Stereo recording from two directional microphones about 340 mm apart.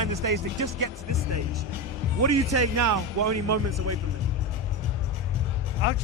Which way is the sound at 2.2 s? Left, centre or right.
Right.